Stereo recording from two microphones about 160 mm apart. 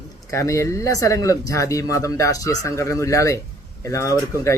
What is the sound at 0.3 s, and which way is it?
Speech, 20° left (ahead or behind).